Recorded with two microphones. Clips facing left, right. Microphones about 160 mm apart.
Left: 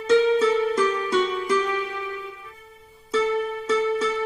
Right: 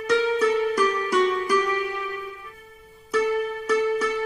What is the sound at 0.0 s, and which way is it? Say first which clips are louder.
Music: left 3 dB; 30° left (ahead or behind).